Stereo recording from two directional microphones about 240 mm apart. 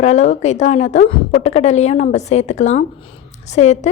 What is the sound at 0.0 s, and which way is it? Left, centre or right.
A woman's voice, left.